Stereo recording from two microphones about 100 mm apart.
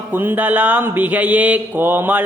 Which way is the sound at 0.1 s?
20° right (ahead or behind).